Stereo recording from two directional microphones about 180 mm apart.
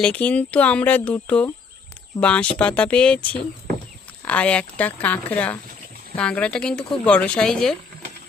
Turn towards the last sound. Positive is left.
turn(degrees=5)  # may be behind; listen again after turning